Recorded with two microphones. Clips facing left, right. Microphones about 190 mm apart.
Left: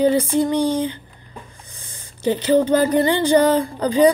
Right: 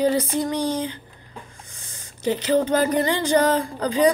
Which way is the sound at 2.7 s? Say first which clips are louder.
Left 4 dB; 30° left (ahead or behind).